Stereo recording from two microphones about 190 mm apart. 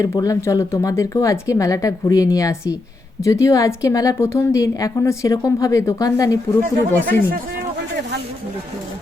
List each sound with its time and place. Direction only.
0.0 s a woman's voice: 20° left (ahead or behind)
7.0 s speech: 50° right (ahead or behind)